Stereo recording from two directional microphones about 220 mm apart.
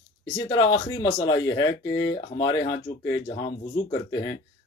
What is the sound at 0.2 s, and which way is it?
Speech, 20° left (ahead or behind).